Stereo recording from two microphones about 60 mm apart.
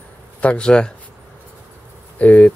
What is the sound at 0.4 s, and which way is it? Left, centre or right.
Speech, centre.